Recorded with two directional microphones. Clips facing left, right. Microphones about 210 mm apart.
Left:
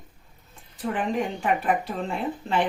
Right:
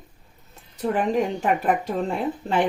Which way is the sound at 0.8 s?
40° right (ahead or behind).